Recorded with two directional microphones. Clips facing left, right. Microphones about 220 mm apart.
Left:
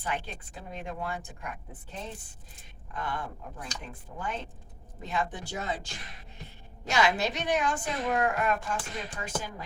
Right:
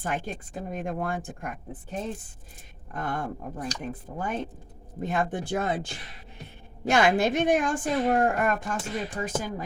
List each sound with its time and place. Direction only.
0.0 s a woman's voice: 50° right (ahead or behind)